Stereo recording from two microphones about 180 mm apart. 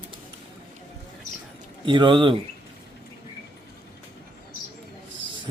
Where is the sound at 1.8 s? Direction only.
25° right (ahead or behind).